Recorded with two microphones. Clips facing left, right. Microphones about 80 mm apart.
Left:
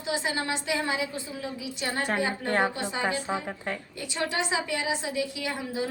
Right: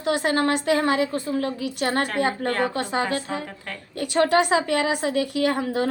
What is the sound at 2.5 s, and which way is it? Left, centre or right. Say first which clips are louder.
A woman's voice: right 3 dB; centre.